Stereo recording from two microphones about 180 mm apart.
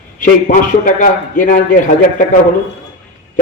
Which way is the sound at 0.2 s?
45° left (ahead or behind).